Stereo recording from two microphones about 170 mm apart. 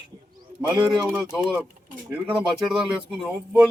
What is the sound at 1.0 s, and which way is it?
Speech, 5° right (ahead or behind).